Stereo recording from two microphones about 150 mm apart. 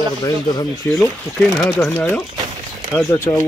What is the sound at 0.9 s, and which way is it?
Speech, centre (ahead or behind).